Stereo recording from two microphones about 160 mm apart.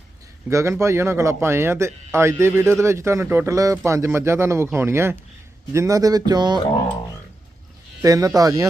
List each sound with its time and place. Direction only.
0.4 s speech: 15° right (ahead or behind)
8.0 s speech: 20° right (ahead or behind)